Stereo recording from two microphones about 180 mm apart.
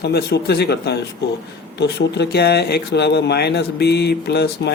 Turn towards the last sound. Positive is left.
turn(degrees=65)  # may be behind; listen again after turning